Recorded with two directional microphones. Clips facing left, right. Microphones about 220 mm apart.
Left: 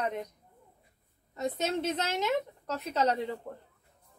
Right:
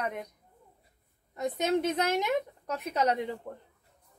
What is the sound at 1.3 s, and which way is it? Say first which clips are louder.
A woman's voice: right 3 dB; 15° right (ahead or behind).